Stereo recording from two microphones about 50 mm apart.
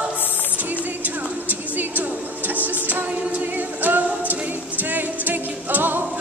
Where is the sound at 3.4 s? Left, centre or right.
Right.